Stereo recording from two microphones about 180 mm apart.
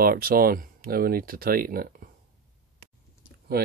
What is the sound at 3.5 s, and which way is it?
Speech, 60° right (ahead or behind).